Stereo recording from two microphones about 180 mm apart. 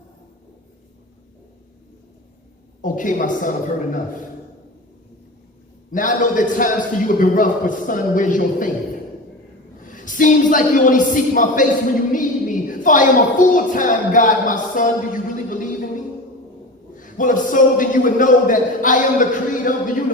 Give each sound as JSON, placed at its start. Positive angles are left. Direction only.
{"t": 2.8, "sound": "a man's voice", "side_deg": 45}
{"t": 5.9, "sound": "a man's voice", "side_deg": 45}
{"t": 9.8, "sound": "a woman's voice", "side_deg": 45}
{"t": 17.0, "sound": "a man's voice", "side_deg": 45}